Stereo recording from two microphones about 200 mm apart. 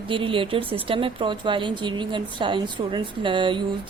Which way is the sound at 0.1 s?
25° right (ahead or behind).